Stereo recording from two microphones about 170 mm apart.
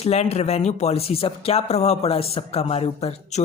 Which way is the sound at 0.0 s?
40° left (ahead or behind).